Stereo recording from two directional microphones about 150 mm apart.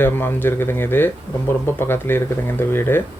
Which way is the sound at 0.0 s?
15° left (ahead or behind).